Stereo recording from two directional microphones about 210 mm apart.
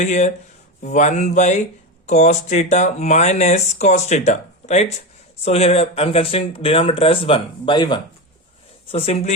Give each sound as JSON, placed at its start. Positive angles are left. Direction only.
{"t": 0.0, "sound": "speech", "side_deg": 35}